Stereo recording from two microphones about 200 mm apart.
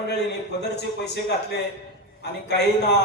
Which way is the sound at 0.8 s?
60° left (ahead or behind).